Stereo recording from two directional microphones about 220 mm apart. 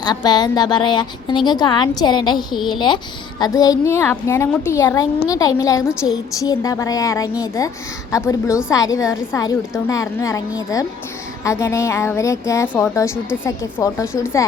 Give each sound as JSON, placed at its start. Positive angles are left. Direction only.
{"t": 0.0, "sound": "a woman's voice", "side_deg": 20}